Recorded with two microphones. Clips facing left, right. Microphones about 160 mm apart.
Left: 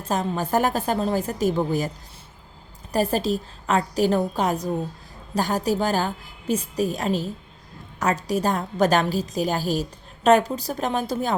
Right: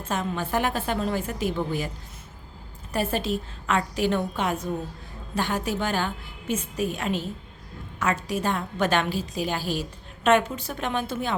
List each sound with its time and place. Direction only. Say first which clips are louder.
0.0 s a woman's voice: left 3 dB; 35° left (ahead or behind)
2.9 s a woman's voice: left 4 dB; 40° left (ahead or behind)